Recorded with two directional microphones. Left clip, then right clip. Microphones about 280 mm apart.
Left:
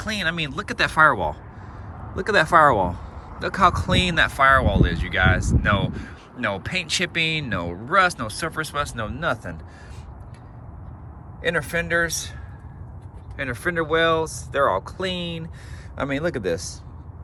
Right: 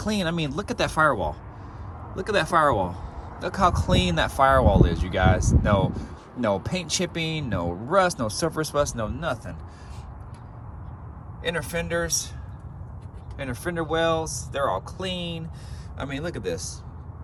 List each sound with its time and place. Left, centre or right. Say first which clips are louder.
0.0 s speech: left 2 dB; centre
11.4 s speech: left 5 dB; centre
13.3 s speech: left 5 dB; centre